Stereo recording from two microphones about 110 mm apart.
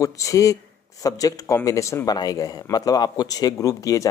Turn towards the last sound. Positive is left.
turn(degrees=30)  # may be behind; listen again after turning